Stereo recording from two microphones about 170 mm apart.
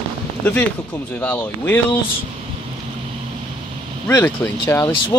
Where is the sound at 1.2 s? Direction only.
5° left (ahead or behind).